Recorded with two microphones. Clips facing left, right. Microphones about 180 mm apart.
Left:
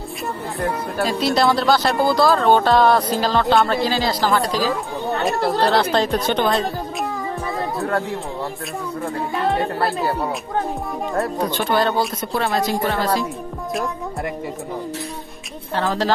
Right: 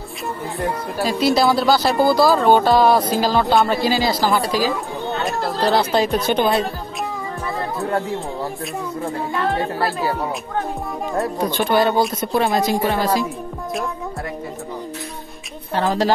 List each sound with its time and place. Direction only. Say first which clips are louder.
0.6 s speech: left 1 dB; centre (ahead or behind)
5.7 s speech: right 1 dB; 5° right (ahead or behind)
9.5 s speech: left 3 dB; centre (ahead or behind)
11.5 s speech: right 3 dB; 15° right (ahead or behind)
15.7 s speech: right 2 dB; 15° right (ahead or behind)